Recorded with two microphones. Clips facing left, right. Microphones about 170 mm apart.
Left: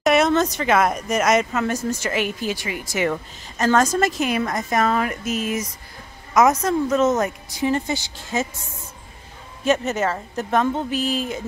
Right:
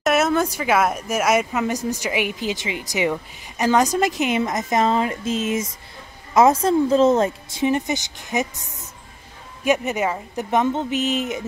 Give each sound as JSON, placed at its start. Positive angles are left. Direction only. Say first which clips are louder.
{"t": 0.0, "sound": "a woman's voice", "louder": "left 2 dB", "side_deg": -5}
{"t": 9.7, "sound": "a woman's voice", "louder": "even", "side_deg": -15}